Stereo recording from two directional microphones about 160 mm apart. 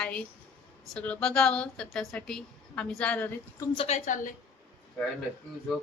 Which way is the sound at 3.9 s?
55° left (ahead or behind).